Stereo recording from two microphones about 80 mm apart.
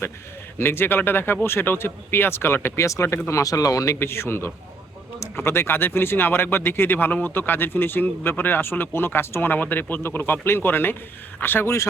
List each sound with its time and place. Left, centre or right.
0.6 s speech: left
4.0 s speech: left